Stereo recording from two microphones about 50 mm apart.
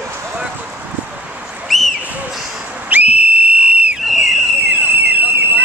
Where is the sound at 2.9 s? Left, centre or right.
Right.